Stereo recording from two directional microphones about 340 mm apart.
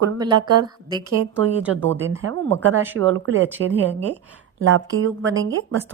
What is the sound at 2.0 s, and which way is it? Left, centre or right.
A woman's voice, right.